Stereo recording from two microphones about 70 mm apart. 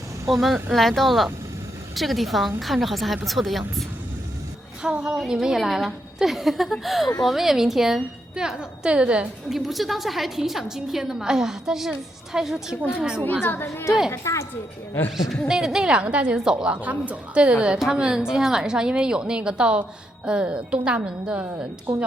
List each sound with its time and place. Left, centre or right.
0.3 s a woman's voice: centre
4.8 s a woman's voice: centre
9.5 s a woman's voice: centre
13.4 s a woman's voice: left
14.1 s a woman's voice: left
15.4 s a woman's voice: centre
16.8 s a woman's voice: right